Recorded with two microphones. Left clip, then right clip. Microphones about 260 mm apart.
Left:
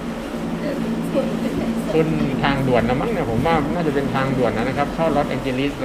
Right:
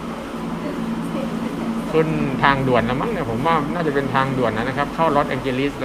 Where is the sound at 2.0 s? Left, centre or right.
Centre.